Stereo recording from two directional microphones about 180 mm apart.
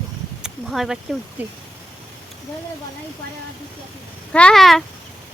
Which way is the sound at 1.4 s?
10° right (ahead or behind).